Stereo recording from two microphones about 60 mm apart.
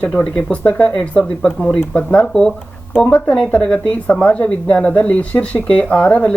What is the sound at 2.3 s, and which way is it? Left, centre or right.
Speech, centre.